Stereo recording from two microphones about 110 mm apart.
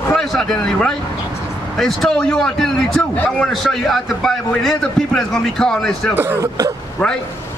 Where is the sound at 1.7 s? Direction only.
5° left (ahead or behind).